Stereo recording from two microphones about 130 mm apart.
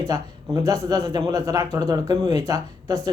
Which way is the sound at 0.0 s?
25° right (ahead or behind).